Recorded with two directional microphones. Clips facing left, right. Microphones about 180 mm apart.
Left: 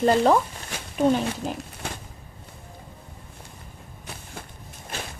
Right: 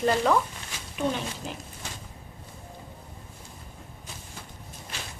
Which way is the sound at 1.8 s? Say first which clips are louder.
Left 7 dB; 60° left (ahead or behind).